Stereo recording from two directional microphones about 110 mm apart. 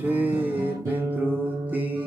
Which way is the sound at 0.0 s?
15° right (ahead or behind).